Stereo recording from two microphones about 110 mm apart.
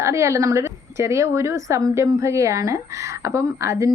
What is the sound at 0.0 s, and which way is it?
A woman's voice, 25° right (ahead or behind).